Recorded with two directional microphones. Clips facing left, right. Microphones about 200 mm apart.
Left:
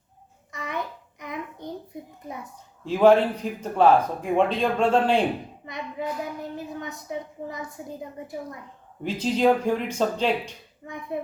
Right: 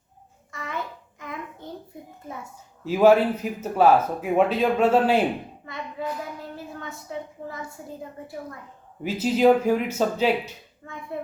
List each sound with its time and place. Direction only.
0.5 s babbling: 20° left (ahead or behind)
1.2 s a sound: 20° left (ahead or behind)
2.8 s a man's voice: 5° right (ahead or behind)
5.6 s hands: 20° left (ahead or behind)
6.7 s a woman's voice: 20° left (ahead or behind)
9.0 s a man's voice: 5° right (ahead or behind)
10.8 s a woman's voice: 15° left (ahead or behind)